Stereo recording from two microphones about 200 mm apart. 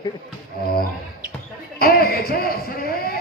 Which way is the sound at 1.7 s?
50° left (ahead or behind).